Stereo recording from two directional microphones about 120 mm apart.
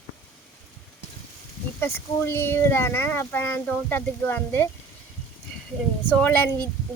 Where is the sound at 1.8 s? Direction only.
20° left (ahead or behind).